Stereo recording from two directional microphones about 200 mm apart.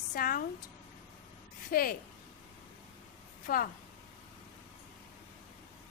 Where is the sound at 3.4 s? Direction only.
45° left (ahead or behind).